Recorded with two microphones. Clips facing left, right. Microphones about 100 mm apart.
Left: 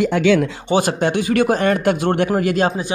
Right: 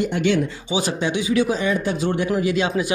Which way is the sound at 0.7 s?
55° left (ahead or behind).